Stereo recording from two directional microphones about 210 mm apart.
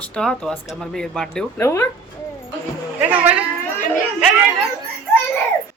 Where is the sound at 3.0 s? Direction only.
5° right (ahead or behind).